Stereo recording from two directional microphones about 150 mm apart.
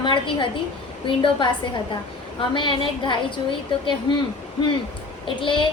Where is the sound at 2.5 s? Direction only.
35° left (ahead or behind).